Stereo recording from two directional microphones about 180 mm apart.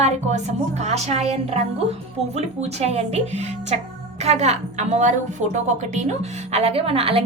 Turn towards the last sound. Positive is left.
turn(degrees=-30)  # may be behind; listen again after turning